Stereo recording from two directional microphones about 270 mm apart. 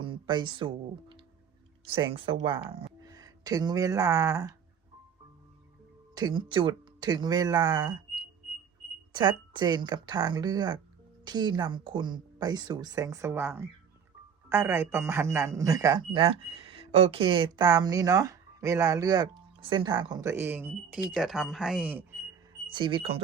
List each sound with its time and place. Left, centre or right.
0.0 s speech: centre
6.1 s speech: centre
9.1 s speech: centre
22.6 s speech: centre